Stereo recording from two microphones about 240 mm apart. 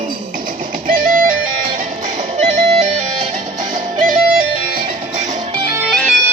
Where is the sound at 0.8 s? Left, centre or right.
Right.